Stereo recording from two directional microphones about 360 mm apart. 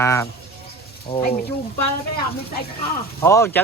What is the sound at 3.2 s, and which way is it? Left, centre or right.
Speech, centre.